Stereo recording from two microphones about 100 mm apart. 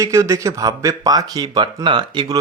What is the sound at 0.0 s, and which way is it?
Speech, 30° right (ahead or behind).